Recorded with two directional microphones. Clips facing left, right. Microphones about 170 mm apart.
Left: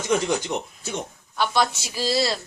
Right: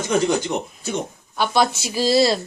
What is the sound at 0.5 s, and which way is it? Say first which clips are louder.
A woman's voice: right 4 dB; 15° right (ahead or behind).